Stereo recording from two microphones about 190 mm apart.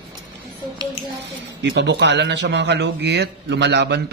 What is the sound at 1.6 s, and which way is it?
A man's voice, 65° right (ahead or behind).